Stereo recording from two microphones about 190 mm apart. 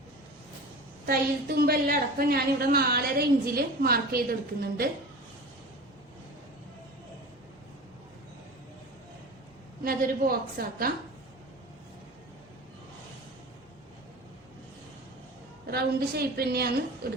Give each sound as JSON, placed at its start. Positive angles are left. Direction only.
{"t": 1.0, "sound": "a woman's voice", "side_deg": -55}
{"t": 9.8, "sound": "a woman's voice", "side_deg": -50}
{"t": 15.6, "sound": "a woman's voice", "side_deg": -55}